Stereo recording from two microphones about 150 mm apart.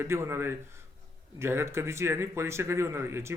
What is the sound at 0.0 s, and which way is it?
Speech, 15° right (ahead or behind).